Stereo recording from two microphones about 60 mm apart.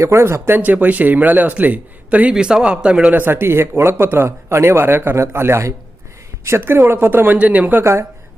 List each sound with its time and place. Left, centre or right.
0.0 s speech: right
0.6 s speech: right
2.3 s speech: centre; by 7.3 s right
7.3 s speech: right